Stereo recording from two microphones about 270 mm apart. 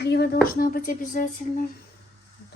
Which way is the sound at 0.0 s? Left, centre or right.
Left.